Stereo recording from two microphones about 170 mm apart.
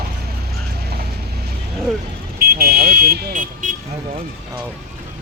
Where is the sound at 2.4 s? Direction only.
60° right (ahead or behind).